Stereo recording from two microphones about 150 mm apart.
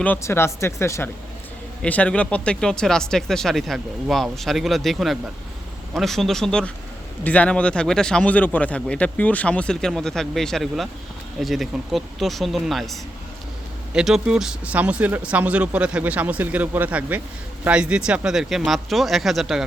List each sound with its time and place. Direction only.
0.0 s speech: 15° left (ahead or behind); by 19.6 s centre (ahead or behind)